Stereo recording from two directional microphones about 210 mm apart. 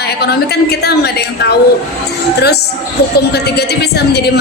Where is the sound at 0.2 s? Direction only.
50° left (ahead or behind).